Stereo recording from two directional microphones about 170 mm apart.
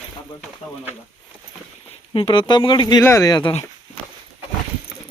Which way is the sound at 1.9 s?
30° left (ahead or behind).